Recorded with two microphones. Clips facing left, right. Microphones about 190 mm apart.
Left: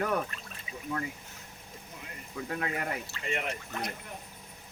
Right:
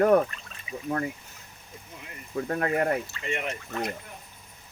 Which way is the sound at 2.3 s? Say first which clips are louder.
Right 8 dB; 50° right (ahead or behind).